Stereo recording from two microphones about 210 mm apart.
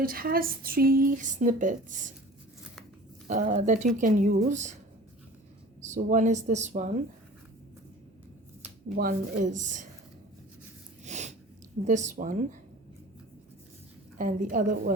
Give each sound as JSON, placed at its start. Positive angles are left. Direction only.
{"t": 0.0, "sound": "a sound", "side_deg": -45}
{"t": 3.2, "sound": "speech", "side_deg": -40}
{"t": 5.9, "sound": "speech", "side_deg": -35}
{"t": 9.0, "sound": "speech", "side_deg": -40}
{"t": 11.0, "sound": "a sound", "side_deg": -35}
{"t": 12.0, "sound": "speech", "side_deg": -35}
{"t": 14.2, "sound": "a woman's voice", "side_deg": -40}